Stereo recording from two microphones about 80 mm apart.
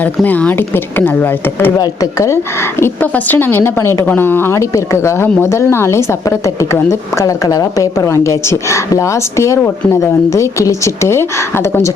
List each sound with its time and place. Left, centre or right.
0.0 s speech: centre
1.8 s speech: left